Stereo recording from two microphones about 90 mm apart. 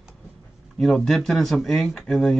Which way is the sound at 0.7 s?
5° left (ahead or behind).